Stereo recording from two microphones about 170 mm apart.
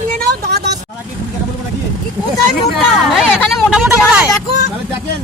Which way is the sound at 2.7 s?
Centre (ahead or behind).